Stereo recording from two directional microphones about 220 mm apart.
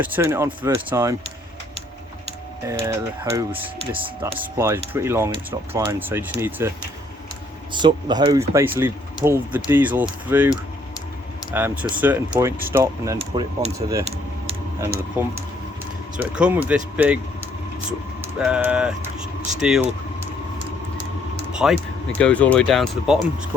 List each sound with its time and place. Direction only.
0.0 s speech: 10° right (ahead or behind)
3.3 s speech: 10° right (ahead or behind)
7.7 s speech: 20° right (ahead or behind)
13.1 s speech: 30° right (ahead or behind)
15.2 s speech: 10° right (ahead or behind)
21.5 s a sound: 5° right (ahead or behind)
22.2 s speech: 5° left (ahead or behind)